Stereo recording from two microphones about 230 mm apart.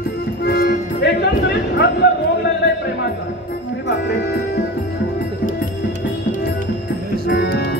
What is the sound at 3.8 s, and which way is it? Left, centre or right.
Music, left.